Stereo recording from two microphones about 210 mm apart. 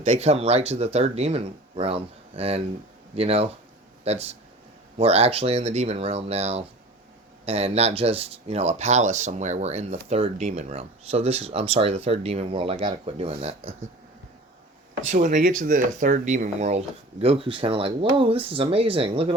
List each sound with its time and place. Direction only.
0.0 s speech: 30° right (ahead or behind)
15.1 s speech: 35° right (ahead or behind)